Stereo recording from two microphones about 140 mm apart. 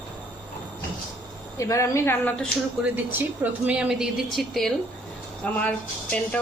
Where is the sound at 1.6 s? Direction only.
20° left (ahead or behind).